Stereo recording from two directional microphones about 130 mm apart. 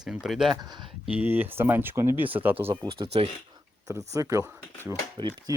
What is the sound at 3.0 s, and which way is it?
Speech, 35° right (ahead or behind).